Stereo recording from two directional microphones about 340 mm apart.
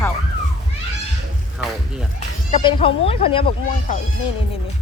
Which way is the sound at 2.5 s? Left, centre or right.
Centre.